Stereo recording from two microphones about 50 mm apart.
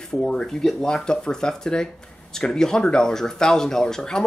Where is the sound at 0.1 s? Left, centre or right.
Centre.